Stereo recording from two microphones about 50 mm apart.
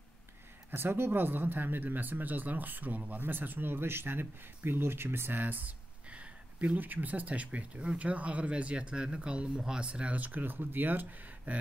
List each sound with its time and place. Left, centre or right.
0.7 s speech: right
6.8 s speech: right